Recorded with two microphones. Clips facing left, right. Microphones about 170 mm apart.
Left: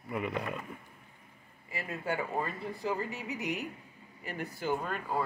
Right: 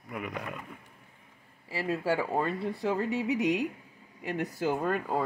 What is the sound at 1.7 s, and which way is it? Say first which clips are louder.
Speech: right 6 dB; 90° right.